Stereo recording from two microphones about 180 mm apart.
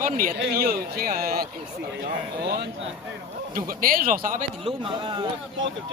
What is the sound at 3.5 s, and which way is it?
Speech, 50° right (ahead or behind).